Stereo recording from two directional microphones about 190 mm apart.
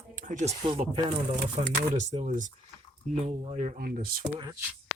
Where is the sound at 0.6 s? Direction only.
25° right (ahead or behind).